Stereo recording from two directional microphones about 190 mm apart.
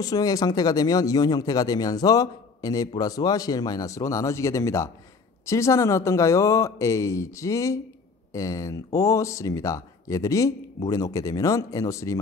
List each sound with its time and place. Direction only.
0.0 s speech: 20° left (ahead or behind)